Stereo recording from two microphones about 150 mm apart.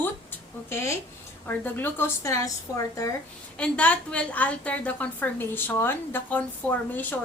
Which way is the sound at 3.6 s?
10° left (ahead or behind).